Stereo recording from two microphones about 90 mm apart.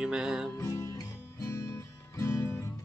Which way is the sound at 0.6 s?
35° left (ahead or behind).